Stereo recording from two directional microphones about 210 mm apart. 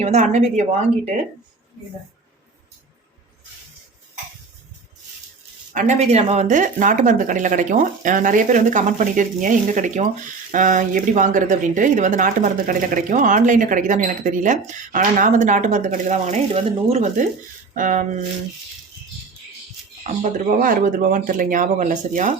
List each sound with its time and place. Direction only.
0.0 s speech: 35° right (ahead or behind)
5.7 s speech: 35° right (ahead or behind)
20.1 s speech: 35° right (ahead or behind)